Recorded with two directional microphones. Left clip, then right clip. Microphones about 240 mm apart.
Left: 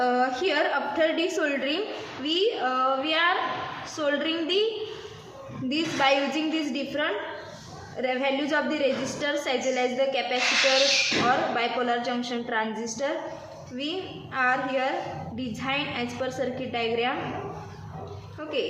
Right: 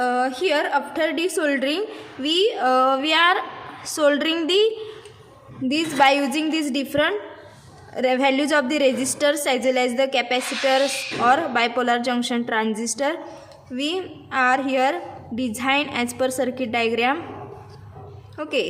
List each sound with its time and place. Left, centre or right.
0.0 s a woman's voice: right
5.6 s a woman's voice: right